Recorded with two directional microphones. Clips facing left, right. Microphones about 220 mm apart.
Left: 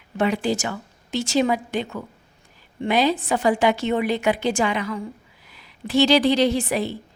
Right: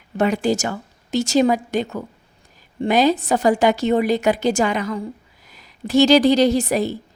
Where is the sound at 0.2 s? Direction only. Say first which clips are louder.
Right 3 dB; 45° right (ahead or behind).